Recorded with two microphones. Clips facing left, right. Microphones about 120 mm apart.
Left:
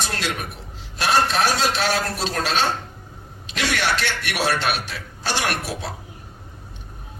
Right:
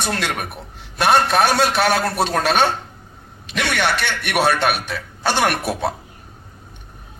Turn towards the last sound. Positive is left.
turn(degrees=-55)  # may be behind; listen again after turning